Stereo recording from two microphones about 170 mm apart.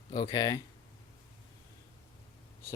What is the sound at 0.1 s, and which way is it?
Speech, 25° left (ahead or behind).